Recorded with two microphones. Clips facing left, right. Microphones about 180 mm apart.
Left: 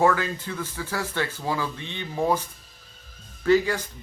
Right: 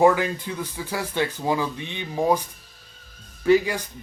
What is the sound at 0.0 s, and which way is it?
Speech, 15° right (ahead or behind).